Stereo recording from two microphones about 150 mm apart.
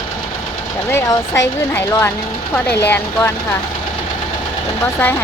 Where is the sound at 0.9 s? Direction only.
15° left (ahead or behind).